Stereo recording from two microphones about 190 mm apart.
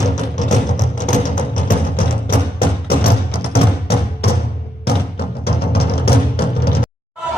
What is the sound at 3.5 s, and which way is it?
Music, 55° left (ahead or behind).